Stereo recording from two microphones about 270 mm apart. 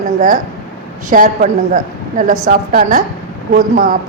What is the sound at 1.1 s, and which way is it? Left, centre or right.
A woman's voice, right.